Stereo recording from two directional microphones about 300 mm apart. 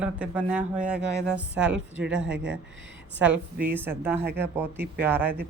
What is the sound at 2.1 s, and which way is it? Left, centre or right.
Speech, right.